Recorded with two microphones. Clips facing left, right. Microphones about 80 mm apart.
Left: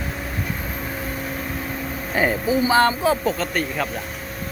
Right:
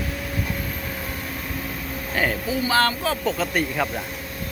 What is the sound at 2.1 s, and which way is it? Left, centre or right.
Speech, centre.